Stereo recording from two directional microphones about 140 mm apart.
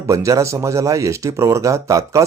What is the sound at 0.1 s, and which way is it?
Speech, 25° right (ahead or behind).